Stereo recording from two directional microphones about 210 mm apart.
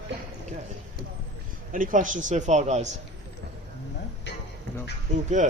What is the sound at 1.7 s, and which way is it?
Speech, 40° right (ahead or behind).